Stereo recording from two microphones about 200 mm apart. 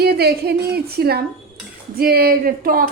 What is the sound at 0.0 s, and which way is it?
A woman's voice, 50° right (ahead or behind).